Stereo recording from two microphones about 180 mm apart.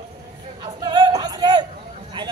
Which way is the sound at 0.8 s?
20° right (ahead or behind).